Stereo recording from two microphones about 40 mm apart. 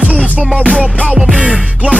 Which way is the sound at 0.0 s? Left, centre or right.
Right.